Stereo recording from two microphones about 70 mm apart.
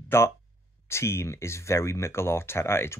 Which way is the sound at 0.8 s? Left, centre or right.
Left.